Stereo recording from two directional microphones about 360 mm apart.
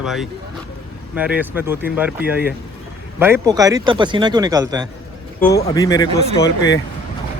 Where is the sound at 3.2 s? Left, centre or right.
Centre.